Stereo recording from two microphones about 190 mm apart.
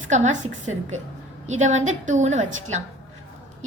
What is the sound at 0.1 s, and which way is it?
A woman's voice, 40° right (ahead or behind).